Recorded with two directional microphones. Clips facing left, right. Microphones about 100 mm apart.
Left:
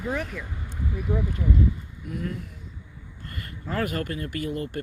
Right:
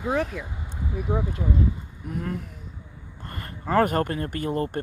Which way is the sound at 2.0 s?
40° right (ahead or behind).